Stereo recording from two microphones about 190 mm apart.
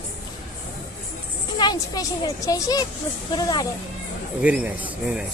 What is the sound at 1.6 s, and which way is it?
A woman's voice, 20° left (ahead or behind).